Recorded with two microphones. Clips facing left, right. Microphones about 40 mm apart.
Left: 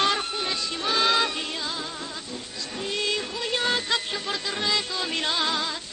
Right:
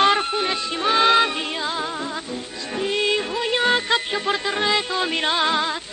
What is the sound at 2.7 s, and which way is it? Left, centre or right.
Music, right.